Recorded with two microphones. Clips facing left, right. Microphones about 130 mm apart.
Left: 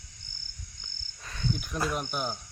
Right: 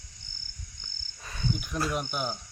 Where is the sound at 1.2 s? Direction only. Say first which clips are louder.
Right 1 dB; 5° right (ahead or behind).